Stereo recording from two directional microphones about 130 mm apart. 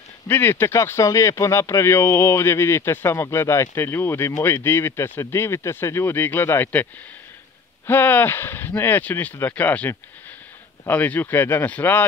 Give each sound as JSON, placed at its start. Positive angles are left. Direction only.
{"t": 0.3, "sound": "speech", "side_deg": 15}